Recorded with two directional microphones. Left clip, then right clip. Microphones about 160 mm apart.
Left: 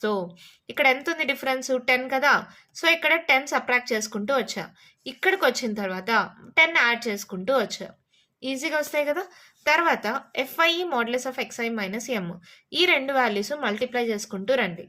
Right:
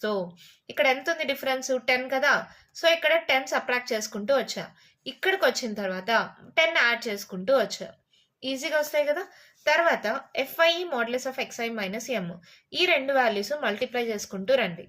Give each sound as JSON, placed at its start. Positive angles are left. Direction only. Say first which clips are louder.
{"t": 0.7, "sound": "a woman's voice", "louder": "left 2 dB", "side_deg": 35}